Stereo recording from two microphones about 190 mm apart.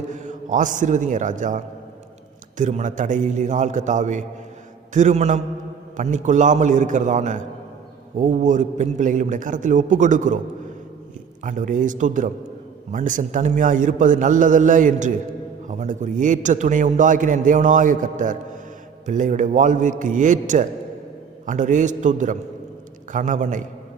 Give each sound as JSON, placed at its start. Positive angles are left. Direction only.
{"t": 0.1, "sound": "a man's voice", "side_deg": -40}
{"t": 11.4, "sound": "a man's voice", "side_deg": -40}